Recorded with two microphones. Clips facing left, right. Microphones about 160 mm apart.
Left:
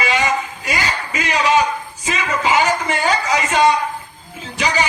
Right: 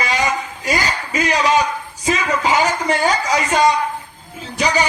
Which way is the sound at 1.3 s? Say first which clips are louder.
Left 1 dB; 40° right (ahead or behind).